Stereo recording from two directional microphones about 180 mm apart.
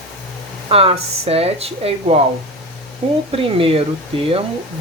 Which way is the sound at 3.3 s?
30° right (ahead or behind).